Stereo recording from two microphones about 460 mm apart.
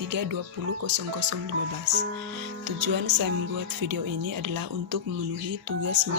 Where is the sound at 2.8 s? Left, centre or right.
Right.